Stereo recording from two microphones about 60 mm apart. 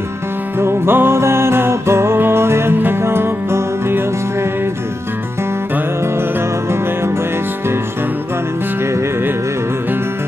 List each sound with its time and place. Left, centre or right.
0.6 s music: right